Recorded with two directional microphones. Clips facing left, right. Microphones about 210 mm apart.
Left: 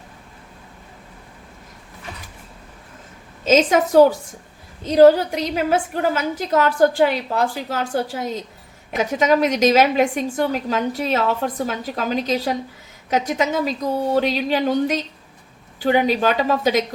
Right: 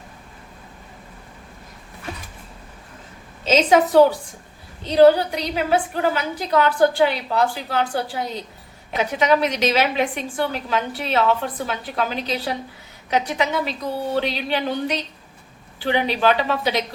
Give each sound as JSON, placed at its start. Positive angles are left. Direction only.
{"t": 3.4, "sound": "a woman's voice", "side_deg": 45}
{"t": 4.8, "sound": "a woman's voice", "side_deg": 45}